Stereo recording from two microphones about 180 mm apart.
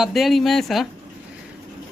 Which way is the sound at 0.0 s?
Centre (ahead or behind).